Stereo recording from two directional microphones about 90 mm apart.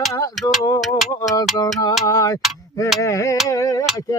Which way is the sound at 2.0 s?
40° left (ahead or behind).